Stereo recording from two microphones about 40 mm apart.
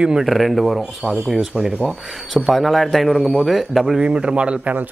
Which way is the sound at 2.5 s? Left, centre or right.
Centre.